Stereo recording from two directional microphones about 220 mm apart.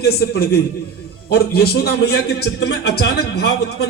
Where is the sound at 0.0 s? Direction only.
45° left (ahead or behind).